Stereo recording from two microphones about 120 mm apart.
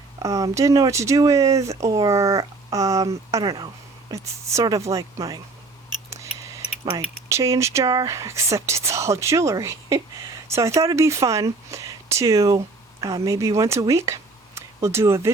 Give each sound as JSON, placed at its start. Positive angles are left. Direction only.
{"t": 0.2, "sound": "speech", "side_deg": -30}
{"t": 7.3, "sound": "speech", "side_deg": -25}